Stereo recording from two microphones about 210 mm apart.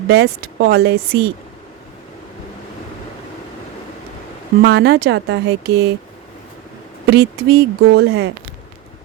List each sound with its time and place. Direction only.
0.1 s speech: 50° right (ahead or behind)
4.6 s speech: 50° right (ahead or behind)
7.1 s speech: 50° right (ahead or behind)